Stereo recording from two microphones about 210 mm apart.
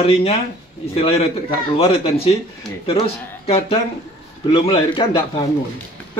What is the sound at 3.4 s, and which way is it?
A man's voice, 25° left (ahead or behind).